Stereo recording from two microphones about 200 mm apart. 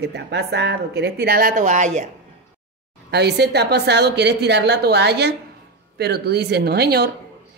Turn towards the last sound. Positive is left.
turn(degrees=-55)  # may be behind; listen again after turning